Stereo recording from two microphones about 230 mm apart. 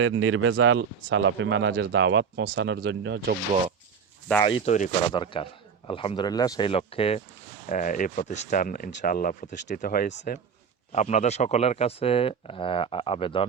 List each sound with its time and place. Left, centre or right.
0.0 s speech: right
4.6 s speech: left
5.1 s speech: left